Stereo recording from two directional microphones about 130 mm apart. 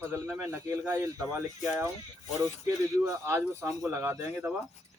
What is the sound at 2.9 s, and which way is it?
Speech, 20° right (ahead or behind).